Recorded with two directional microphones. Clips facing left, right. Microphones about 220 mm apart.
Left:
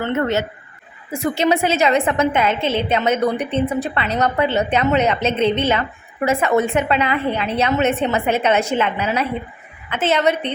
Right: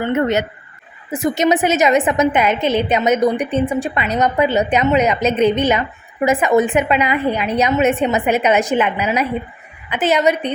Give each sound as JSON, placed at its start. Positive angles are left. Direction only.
{"t": 0.0, "sound": "a woman's voice", "side_deg": -15}